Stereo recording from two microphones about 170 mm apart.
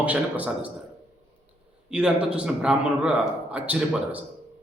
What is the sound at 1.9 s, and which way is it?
A man's voice, 5° right (ahead or behind).